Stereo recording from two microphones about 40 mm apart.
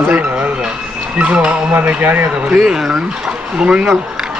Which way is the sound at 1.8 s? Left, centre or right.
Right.